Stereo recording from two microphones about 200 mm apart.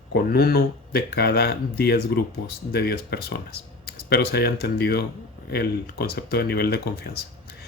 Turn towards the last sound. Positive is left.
turn(degrees=50)  # may be behind; listen again after turning